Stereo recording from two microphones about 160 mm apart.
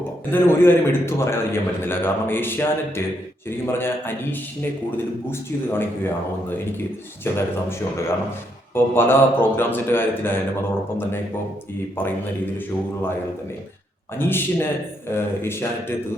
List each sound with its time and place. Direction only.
0.3 s a man's voice: 15° left (ahead or behind)
7.3 s a man's voice: 15° left (ahead or behind)
12.5 s a man's voice: 15° left (ahead or behind)
14.2 s a man's voice: 15° left (ahead or behind)